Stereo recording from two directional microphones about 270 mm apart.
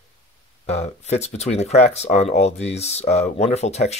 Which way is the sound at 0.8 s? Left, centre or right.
Left.